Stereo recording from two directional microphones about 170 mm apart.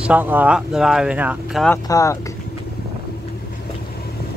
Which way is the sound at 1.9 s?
20° left (ahead or behind).